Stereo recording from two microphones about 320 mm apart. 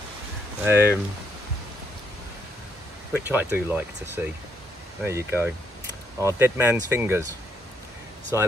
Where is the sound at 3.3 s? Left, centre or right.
Centre.